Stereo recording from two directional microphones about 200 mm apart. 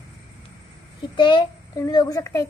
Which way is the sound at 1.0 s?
25° left (ahead or behind).